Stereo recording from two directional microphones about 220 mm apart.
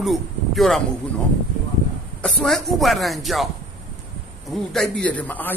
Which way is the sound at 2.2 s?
Centre (ahead or behind).